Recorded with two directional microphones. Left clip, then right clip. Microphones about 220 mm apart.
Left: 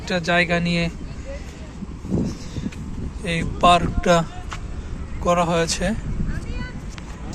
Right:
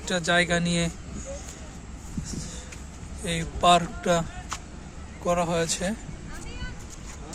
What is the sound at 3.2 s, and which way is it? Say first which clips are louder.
Speech: left 4 dB; 10° right (ahead or behind).